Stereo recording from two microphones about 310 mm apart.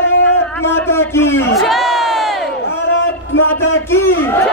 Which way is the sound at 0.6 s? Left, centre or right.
Centre.